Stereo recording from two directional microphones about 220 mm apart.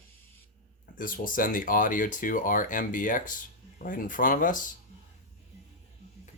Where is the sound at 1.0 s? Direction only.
40° left (ahead or behind).